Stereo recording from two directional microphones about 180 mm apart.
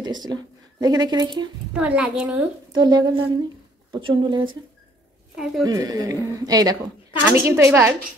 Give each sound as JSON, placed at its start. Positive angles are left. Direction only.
{"t": 0.0, "sound": "speech", "side_deg": -25}
{"t": 1.8, "sound": "a woman's voice", "side_deg": -5}
{"t": 2.7, "sound": "speech", "side_deg": -25}
{"t": 5.6, "sound": "a woman's voice", "side_deg": -20}